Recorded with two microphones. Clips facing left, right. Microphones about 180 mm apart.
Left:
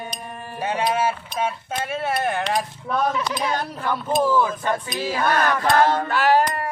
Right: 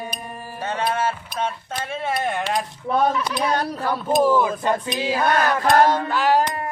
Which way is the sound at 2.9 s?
25° right (ahead or behind).